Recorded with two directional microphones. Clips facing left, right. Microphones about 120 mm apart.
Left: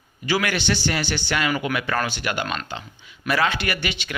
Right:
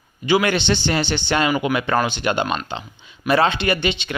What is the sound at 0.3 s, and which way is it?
Speech, 20° right (ahead or behind).